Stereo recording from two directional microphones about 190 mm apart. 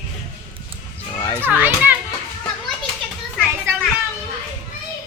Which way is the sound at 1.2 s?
15° left (ahead or behind).